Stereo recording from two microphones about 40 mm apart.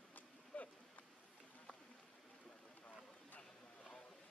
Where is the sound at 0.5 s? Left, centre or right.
Left.